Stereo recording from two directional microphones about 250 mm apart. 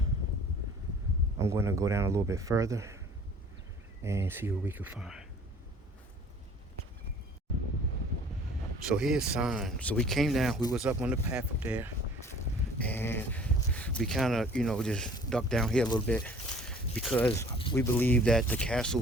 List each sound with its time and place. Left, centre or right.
1.4 s speech: centre
4.0 s speech: centre
8.9 s speech: centre
12.8 s speech: centre
16.0 s a sound: centre
17.7 s speech: centre